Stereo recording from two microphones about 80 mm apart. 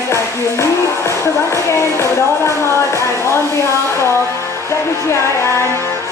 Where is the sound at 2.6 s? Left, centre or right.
Left.